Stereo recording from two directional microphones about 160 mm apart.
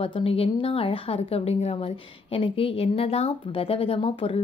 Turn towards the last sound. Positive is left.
turn(degrees=35)  # may be behind; listen again after turning